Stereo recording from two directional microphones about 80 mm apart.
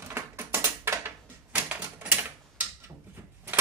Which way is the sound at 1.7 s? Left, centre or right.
Right.